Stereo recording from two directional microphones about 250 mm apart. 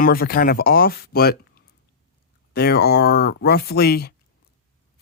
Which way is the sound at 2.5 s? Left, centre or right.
Left.